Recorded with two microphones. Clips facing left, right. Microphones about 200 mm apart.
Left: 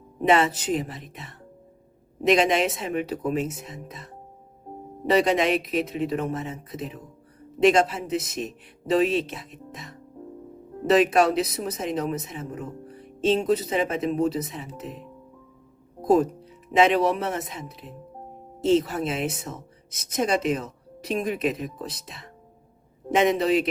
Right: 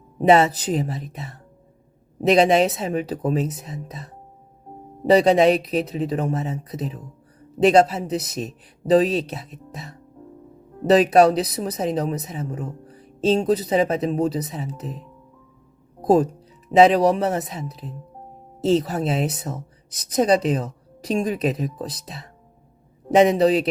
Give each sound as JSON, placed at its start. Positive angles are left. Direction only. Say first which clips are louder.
{"t": 0.2, "sound": "speech", "louder": "right 5 dB", "side_deg": -35}
{"t": 5.1, "sound": "speech", "louder": "right 6 dB", "side_deg": -35}
{"t": 16.7, "sound": "speech", "louder": "right 5 dB", "side_deg": -35}